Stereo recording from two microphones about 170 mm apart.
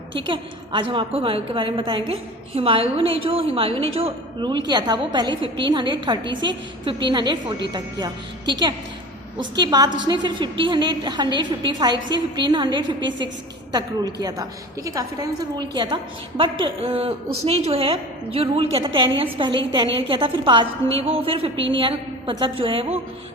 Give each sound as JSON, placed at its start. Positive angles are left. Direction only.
{"t": 0.1, "sound": "a woman's voice", "side_deg": -30}